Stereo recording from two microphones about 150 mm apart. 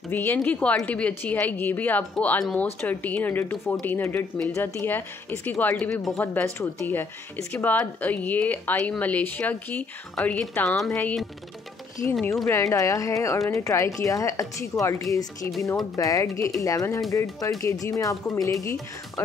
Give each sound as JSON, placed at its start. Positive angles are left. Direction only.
{"t": 0.1, "sound": "speech", "side_deg": 10}
{"t": 6.1, "sound": "speech", "side_deg": 15}
{"t": 12.4, "sound": "speech", "side_deg": 20}